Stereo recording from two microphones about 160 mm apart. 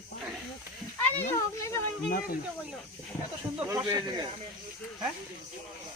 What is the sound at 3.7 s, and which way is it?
Speech, 20° right (ahead or behind).